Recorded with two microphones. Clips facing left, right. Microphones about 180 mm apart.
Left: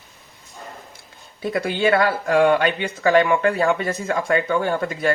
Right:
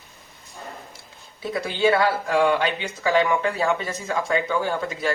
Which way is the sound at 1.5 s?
55° left (ahead or behind).